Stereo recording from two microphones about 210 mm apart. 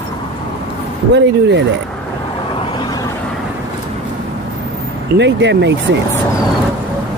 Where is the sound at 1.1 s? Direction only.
55° right (ahead or behind).